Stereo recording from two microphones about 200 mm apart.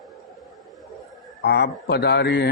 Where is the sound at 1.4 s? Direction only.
55° left (ahead or behind).